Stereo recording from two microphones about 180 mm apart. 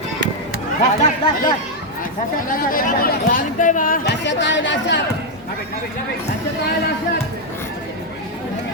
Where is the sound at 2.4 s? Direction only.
50° left (ahead or behind).